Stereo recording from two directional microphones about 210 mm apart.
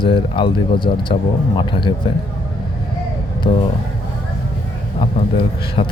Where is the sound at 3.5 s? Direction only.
25° left (ahead or behind).